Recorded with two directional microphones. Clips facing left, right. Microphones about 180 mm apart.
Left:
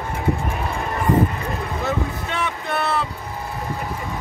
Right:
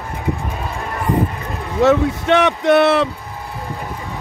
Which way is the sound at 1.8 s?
85° right.